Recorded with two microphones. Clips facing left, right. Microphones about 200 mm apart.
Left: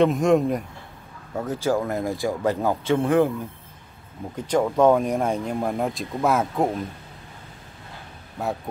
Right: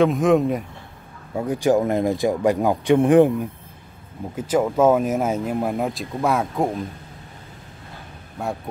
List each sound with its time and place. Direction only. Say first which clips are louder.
0.0 s speech: right 1 dB; centre (ahead or behind)
1.3 s speech: right 5 dB; 10° right (ahead or behind)
4.4 s speech: right 1 dB; 5° right (ahead or behind)
8.4 s speech: even; centre (ahead or behind)